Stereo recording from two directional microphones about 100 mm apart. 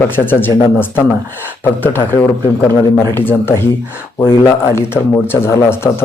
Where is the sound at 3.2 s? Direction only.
20° left (ahead or behind).